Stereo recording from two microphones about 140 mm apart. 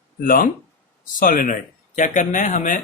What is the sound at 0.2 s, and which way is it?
Speech, 80° left.